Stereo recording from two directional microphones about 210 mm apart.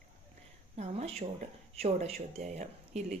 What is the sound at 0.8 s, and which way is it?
Speech, 30° right (ahead or behind).